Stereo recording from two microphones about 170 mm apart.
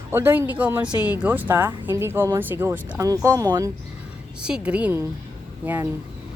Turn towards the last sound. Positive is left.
turn(degrees=-10)  # may be behind; listen again after turning